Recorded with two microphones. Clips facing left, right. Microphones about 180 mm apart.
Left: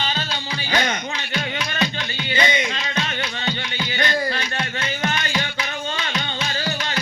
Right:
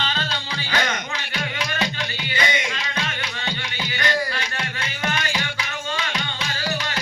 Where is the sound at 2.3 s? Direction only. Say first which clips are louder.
Left 4 dB; 25° left (ahead or behind).